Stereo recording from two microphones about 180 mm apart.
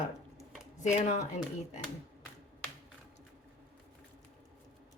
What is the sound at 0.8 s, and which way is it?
Speech, 40° left (ahead or behind).